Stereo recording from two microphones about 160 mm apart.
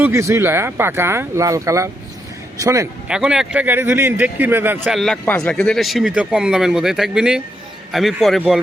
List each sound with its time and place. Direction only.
0.0 s speech: 20° right (ahead or behind)
3.1 s speech: 5° right (ahead or behind)
4.9 s speech: 5° left (ahead or behind)